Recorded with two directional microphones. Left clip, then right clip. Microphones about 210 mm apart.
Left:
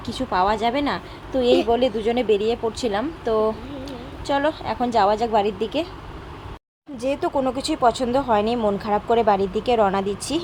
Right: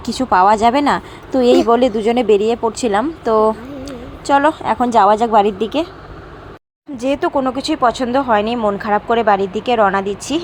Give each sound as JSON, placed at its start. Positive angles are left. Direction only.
{"t": 0.0, "sound": "speech", "side_deg": -35}
{"t": 6.9, "sound": "speech", "side_deg": -20}